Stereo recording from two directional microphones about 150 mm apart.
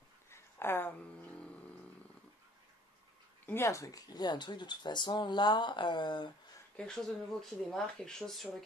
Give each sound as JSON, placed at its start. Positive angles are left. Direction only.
{"t": 0.3, "sound": "dog", "side_deg": 15}
{"t": 3.4, "sound": "speech", "side_deg": 15}
{"t": 6.8, "sound": "speech", "side_deg": 5}